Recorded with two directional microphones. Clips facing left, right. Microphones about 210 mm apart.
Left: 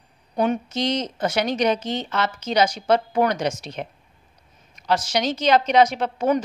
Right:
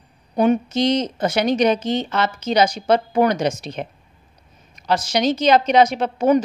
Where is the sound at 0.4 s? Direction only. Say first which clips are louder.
Right 5 dB; 15° right (ahead or behind).